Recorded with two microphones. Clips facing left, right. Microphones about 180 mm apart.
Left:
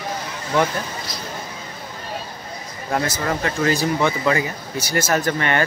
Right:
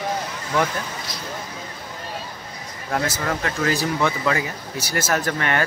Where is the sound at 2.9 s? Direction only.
5° left (ahead or behind).